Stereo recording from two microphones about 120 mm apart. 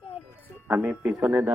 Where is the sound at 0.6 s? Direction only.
10° right (ahead or behind).